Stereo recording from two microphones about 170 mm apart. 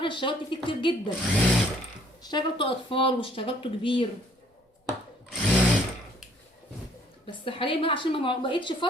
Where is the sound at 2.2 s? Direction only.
25° left (ahead or behind).